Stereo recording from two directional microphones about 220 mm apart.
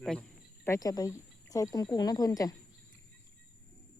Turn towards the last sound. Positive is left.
turn(degrees=15)  # may be behind; listen again after turning